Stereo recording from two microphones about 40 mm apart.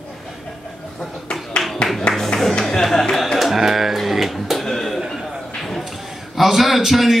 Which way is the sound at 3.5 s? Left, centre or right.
Centre.